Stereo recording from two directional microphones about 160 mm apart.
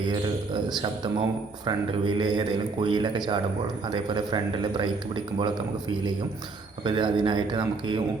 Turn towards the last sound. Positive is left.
turn(degrees=-30)  # may be behind; listen again after turning